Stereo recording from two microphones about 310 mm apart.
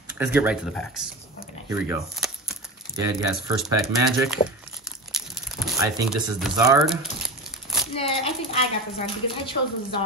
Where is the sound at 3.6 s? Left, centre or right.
Centre.